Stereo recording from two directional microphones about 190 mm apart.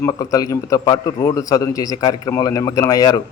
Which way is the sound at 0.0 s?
20° left (ahead or behind).